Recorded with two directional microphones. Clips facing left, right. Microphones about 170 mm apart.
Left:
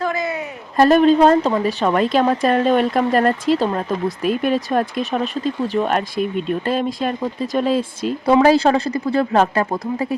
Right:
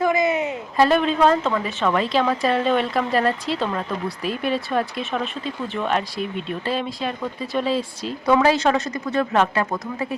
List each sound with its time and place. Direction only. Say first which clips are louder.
0.0 s a sound: right 3 dB; 15° right (ahead or behind)
0.8 s a woman's voice: left 6 dB; 40° left (ahead or behind)
8.3 s speech: left 4 dB; 35° left (ahead or behind)